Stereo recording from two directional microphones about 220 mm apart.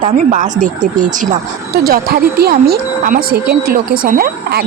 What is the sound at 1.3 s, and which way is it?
Speech, 45° right (ahead or behind).